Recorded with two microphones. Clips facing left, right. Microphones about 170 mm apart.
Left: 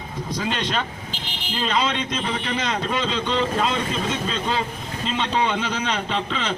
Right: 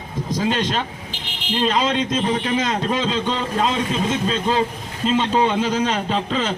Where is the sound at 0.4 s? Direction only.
40° right (ahead or behind).